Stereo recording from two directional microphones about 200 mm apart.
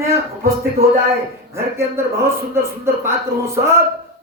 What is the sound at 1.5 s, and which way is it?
Speech, 15° right (ahead or behind).